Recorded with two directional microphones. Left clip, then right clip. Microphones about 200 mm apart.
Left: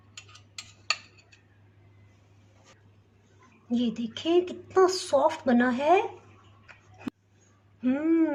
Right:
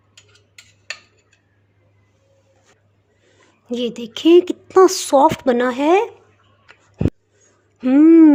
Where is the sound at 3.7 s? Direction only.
50° right (ahead or behind).